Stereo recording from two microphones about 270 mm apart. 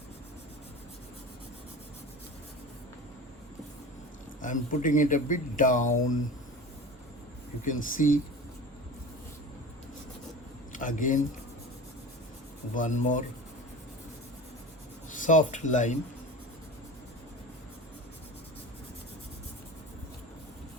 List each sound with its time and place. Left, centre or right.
4.4 s speech: left
7.6 s speech: left
10.7 s a sound: left
12.7 s speech: left
15.1 s speech: left